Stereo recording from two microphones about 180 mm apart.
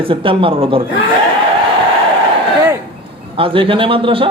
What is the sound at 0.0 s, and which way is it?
Speech, 30° right (ahead or behind).